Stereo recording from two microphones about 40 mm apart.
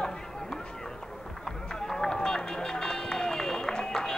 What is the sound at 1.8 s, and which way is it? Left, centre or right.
Run, centre.